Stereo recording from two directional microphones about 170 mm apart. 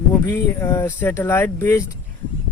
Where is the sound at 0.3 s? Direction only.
15° left (ahead or behind).